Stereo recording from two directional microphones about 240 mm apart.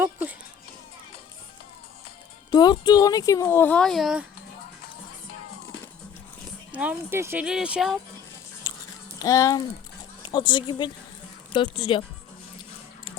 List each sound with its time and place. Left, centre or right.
0.0 s children playing: centre
2.5 s speech: centre
6.7 s speech: centre
8.7 s a sound: centre
9.1 s speech: centre